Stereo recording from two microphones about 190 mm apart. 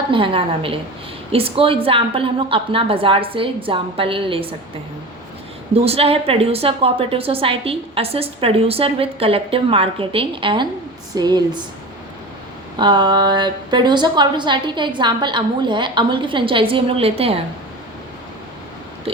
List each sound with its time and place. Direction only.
0.1 s a woman's voice: 25° right (ahead or behind)
5.7 s a woman's voice: 30° right (ahead or behind)
12.8 s a woman's voice: 25° right (ahead or behind)
19.1 s a sound: 30° right (ahead or behind)